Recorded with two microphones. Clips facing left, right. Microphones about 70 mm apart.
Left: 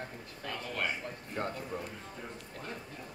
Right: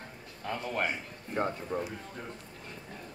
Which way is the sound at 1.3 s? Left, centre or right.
Right.